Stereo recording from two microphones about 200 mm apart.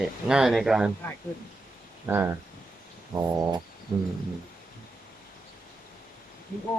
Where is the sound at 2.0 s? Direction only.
10° right (ahead or behind).